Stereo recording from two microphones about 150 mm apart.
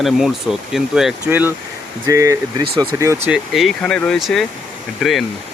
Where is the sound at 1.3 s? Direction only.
15° right (ahead or behind).